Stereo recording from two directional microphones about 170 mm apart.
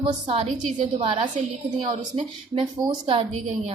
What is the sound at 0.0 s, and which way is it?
Speech, 35° right (ahead or behind).